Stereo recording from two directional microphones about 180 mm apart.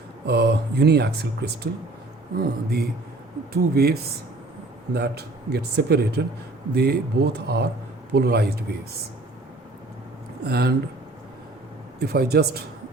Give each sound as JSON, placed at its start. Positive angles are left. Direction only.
{"t": 0.3, "sound": "speech", "side_deg": -65}
{"t": 10.4, "sound": "speech", "side_deg": -60}
{"t": 11.9, "sound": "speech", "side_deg": -60}